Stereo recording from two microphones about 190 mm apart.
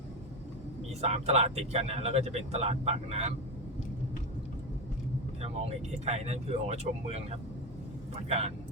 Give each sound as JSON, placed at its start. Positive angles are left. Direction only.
{"t": 1.0, "sound": "speech", "side_deg": -35}
{"t": 5.4, "sound": "speech", "side_deg": -35}